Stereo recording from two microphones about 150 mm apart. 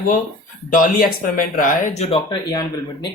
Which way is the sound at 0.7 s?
70° left (ahead or behind).